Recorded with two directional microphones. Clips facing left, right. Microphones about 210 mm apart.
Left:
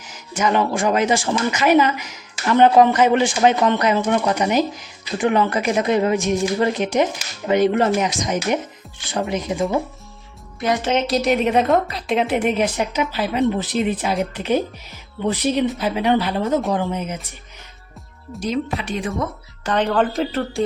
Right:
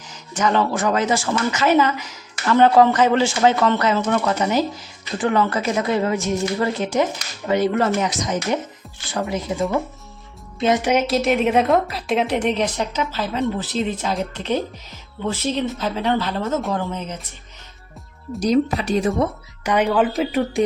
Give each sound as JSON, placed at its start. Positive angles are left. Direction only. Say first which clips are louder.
{"t": 0.3, "sound": "speech", "louder": "even", "side_deg": 15}
{"t": 10.6, "sound": "speech", "louder": "right 2 dB", "side_deg": -20}
{"t": 11.0, "sound": "a woman's voice", "louder": "even", "side_deg": 0}
{"t": 18.3, "sound": "speech", "louder": "right 5 dB", "side_deg": -40}
{"t": 19.6, "sound": "speech", "louder": "right 1 dB", "side_deg": -10}